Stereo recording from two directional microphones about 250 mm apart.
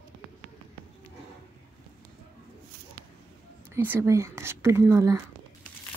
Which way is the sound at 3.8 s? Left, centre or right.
Centre.